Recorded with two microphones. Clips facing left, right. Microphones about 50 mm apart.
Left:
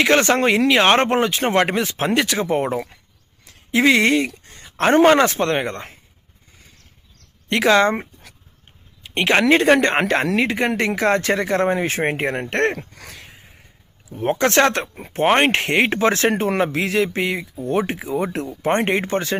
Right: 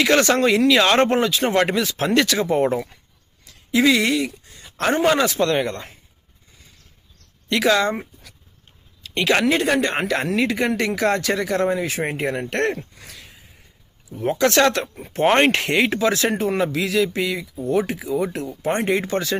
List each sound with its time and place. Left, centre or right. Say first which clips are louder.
0.0 s speech: left 1 dB; left
2.6 s speech: right 2 dB; centre
3.4 s speech: left 1 dB; left
4.3 s a sound: left 1 dB; left
4.9 s speech: left 5 dB; left
7.5 s speech: left 3 dB; left
9.5 s speech: left 5 dB; left
14.1 s speech: even; left